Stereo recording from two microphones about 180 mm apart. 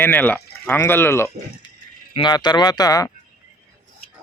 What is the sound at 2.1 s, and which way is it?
Speech, 25° left (ahead or behind).